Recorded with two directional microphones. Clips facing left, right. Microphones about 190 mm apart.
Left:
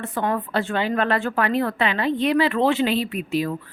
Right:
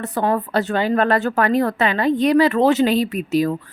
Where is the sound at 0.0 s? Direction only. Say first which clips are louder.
Right 4 dB; 40° right (ahead or behind).